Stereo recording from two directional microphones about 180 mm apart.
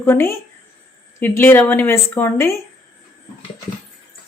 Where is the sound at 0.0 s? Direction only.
15° left (ahead or behind).